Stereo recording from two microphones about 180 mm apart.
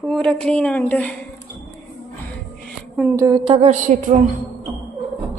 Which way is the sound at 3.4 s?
30° right (ahead or behind).